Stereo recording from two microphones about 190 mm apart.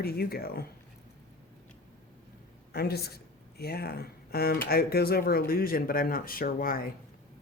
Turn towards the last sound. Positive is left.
turn(degrees=50)  # may be behind; listen again after turning